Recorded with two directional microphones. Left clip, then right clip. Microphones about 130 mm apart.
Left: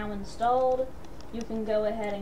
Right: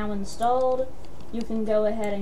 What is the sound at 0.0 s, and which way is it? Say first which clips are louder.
A woman's voice: right 3 dB; 20° right (ahead or behind).